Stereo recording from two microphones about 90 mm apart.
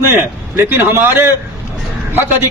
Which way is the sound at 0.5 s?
25° right (ahead or behind).